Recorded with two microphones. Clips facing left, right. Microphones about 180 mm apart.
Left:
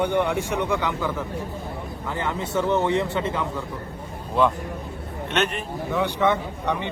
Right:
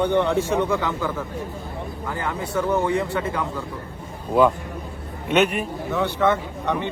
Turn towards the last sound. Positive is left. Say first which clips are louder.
# right 1 dB
turn(degrees=15)  # may be behind; listen again after turning